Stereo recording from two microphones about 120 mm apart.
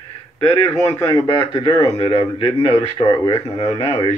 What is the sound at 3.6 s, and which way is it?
Speech, 35° left (ahead or behind).